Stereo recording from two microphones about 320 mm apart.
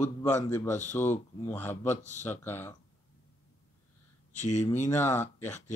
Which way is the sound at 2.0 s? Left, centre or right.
Left.